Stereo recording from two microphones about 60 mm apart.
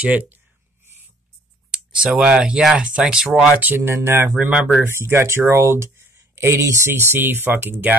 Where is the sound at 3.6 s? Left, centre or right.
Right.